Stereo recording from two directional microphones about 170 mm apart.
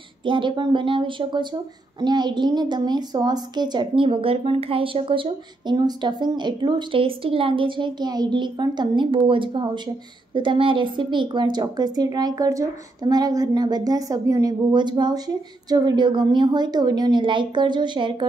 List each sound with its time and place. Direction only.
0.2 s speech: 30° right (ahead or behind)